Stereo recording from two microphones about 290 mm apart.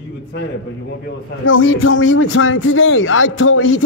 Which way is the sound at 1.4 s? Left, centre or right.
Left.